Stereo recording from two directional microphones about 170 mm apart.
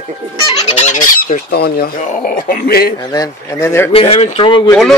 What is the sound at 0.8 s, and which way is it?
Fowl, 50° left (ahead or behind).